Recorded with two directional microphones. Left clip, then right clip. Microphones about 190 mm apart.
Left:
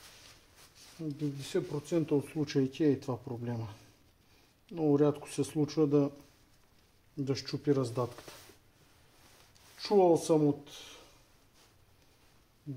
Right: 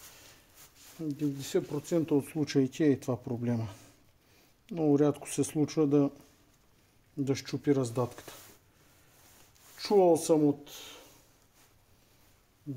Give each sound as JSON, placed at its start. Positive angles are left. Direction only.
{"t": 1.0, "sound": "speech", "side_deg": -60}
{"t": 7.2, "sound": "speech", "side_deg": -55}
{"t": 9.8, "sound": "speech", "side_deg": -55}